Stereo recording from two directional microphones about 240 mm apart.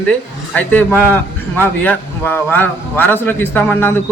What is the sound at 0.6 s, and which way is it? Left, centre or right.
A man's voice, centre.